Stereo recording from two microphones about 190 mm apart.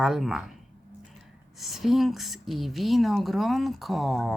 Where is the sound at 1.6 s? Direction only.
Centre (ahead or behind).